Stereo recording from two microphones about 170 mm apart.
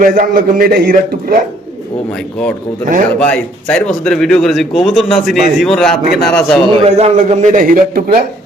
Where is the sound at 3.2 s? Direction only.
5° left (ahead or behind).